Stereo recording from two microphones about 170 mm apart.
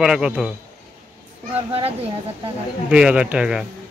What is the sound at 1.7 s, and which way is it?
Speech, 35° right (ahead or behind).